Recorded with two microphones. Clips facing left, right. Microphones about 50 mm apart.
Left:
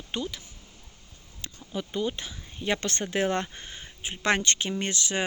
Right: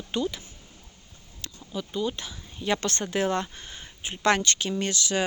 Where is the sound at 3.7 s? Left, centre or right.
Centre.